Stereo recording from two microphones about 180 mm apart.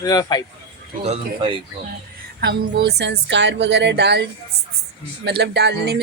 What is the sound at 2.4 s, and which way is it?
Speech, 60° right (ahead or behind).